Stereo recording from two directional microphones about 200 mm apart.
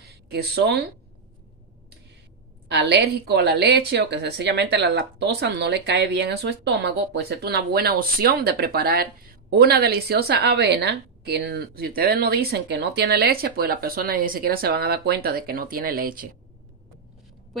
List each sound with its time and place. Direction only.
0.0 s a woman's voice: 50° right (ahead or behind)
2.7 s a woman's voice: 55° right (ahead or behind)